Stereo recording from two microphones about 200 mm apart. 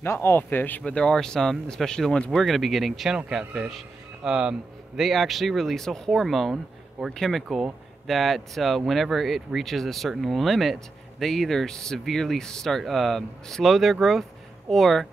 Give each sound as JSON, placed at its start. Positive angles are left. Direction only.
{"t": 0.0, "sound": "speech", "side_deg": 10}